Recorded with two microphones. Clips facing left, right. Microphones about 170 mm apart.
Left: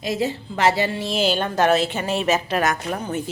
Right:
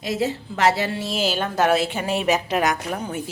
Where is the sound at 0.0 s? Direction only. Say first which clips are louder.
Even; centre (ahead or behind).